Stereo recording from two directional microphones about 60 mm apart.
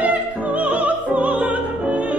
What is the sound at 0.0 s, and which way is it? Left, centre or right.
Music, right.